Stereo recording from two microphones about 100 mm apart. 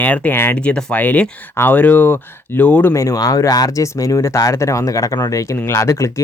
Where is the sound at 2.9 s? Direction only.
30° left (ahead or behind).